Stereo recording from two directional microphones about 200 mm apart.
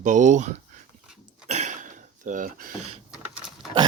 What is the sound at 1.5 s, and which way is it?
Cough, 35° right (ahead or behind).